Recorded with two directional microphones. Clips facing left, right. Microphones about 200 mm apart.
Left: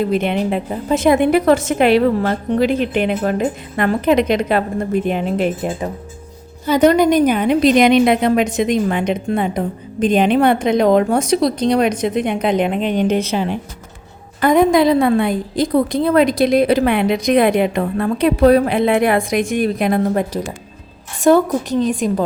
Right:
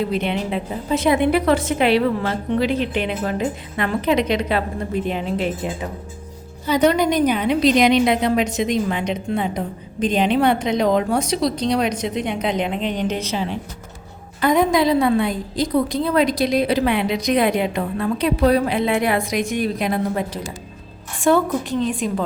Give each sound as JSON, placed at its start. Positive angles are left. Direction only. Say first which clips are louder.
{"t": 0.1, "sound": "a woman's voice", "louder": "left 5 dB", "side_deg": 50}
{"t": 21.2, "sound": "a woman's voice", "louder": "left 5 dB", "side_deg": 40}